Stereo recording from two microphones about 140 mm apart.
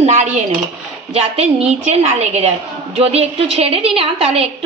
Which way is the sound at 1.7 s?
50° right (ahead or behind).